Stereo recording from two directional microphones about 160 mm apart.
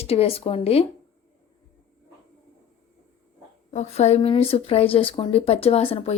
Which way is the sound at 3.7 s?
40° left (ahead or behind).